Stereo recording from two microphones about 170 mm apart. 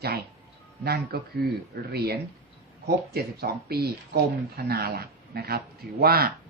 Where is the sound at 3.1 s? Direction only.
70° right (ahead or behind).